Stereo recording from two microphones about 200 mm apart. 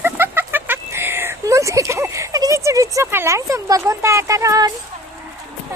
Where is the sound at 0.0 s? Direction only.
10° right (ahead or behind).